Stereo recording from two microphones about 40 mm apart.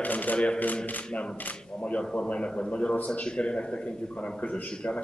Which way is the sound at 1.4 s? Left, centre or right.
Left.